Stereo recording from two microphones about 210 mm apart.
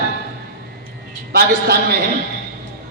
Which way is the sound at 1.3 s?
50° right (ahead or behind).